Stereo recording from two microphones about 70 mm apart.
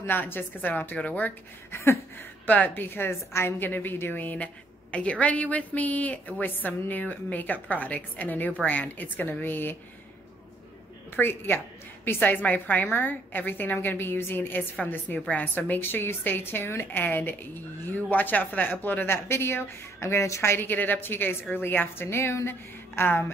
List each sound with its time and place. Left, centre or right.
0.0 s a woman's voice: left
11.1 s a woman's voice: left
20.5 s a woman's voice: left